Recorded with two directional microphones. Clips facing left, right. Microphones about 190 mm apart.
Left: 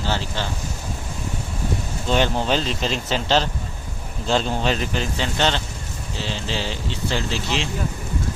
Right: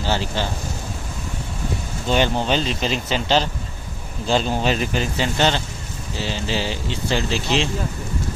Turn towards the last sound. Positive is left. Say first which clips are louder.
# right 3 dB
turn(degrees=-15)  # may be behind; listen again after turning